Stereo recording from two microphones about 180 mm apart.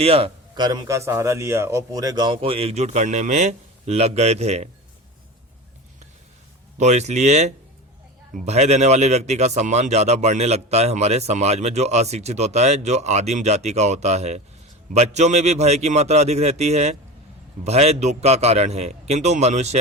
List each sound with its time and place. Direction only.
0.0 s speech: 30° right (ahead or behind)
6.7 s speech: 40° right (ahead or behind)